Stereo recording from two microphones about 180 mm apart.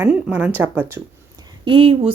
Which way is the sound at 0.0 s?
10° right (ahead or behind).